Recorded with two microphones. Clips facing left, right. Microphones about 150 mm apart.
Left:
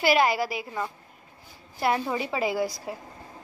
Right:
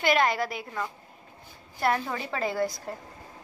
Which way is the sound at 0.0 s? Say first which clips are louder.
Left 2 dB; 5° left (ahead or behind).